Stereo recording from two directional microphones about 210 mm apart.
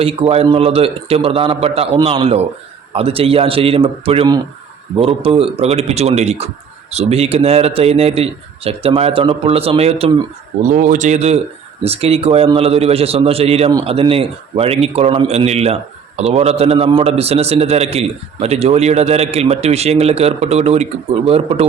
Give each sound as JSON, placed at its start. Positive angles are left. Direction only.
{"t": 0.0, "sound": "a man's voice", "side_deg": -30}